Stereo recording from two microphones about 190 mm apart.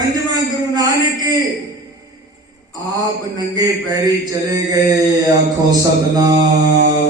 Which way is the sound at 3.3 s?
20° right (ahead or behind).